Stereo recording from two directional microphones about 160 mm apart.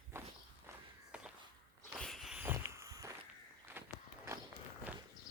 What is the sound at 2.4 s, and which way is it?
Walk, 15° right (ahead or behind).